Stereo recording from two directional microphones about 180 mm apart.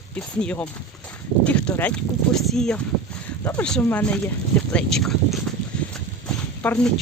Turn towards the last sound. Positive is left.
turn(degrees=5)  # may be behind; listen again after turning